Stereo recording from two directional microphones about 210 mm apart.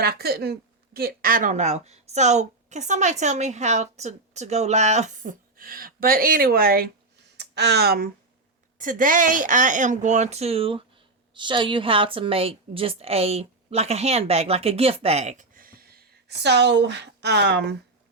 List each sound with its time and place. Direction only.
0.0 s a woman's voice: 50° right (ahead or behind)